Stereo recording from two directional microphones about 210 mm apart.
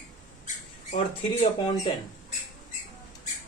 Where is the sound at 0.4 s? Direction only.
35° left (ahead or behind).